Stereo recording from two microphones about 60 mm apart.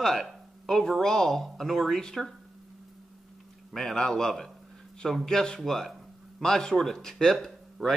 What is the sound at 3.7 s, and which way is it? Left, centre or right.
Speech, centre.